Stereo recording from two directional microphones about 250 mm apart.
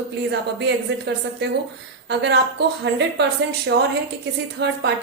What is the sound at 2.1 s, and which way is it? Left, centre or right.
A woman's voice, right.